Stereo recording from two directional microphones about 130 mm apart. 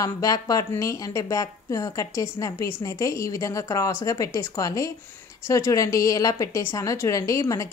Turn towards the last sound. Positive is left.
turn(degrees=25)  # may be behind; listen again after turning